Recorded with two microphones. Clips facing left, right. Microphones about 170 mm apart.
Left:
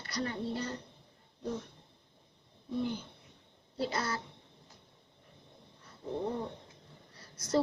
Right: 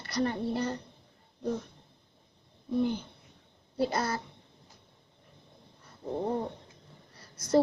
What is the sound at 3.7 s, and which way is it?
Speech, 50° right (ahead or behind).